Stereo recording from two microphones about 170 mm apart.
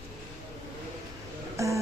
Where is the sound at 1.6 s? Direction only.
20° right (ahead or behind).